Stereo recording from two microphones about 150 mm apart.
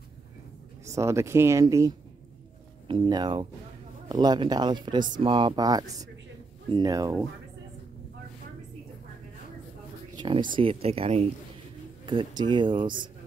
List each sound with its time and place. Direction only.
0.9 s speech: 20° right (ahead or behind)
10.1 s music: 35° right (ahead or behind)
10.5 s speech: 40° right (ahead or behind)
12.1 s speech: 30° right (ahead or behind)